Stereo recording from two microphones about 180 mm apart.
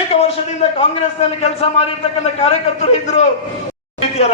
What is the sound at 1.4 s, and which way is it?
A man's voice, 35° left (ahead or behind).